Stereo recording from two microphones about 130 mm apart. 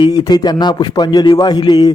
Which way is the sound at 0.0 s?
30° left (ahead or behind).